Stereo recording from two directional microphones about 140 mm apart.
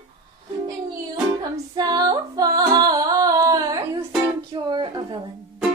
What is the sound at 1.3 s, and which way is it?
Music, 30° right (ahead or behind).